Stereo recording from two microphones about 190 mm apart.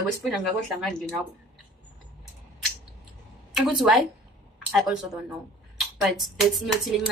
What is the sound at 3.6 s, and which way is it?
A woman's voice, centre (ahead or behind).